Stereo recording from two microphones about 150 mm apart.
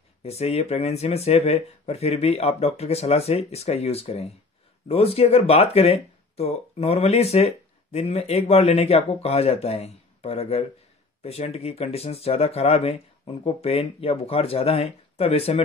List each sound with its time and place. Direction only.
0.2 s speech: 45° left (ahead or behind)